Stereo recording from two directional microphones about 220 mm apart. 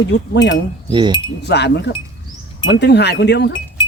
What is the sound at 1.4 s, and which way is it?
Speech, 50° left (ahead or behind).